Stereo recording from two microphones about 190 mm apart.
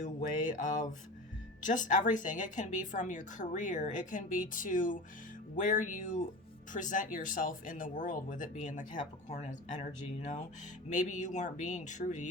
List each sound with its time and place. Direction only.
0.0 s speech: 40° left (ahead or behind)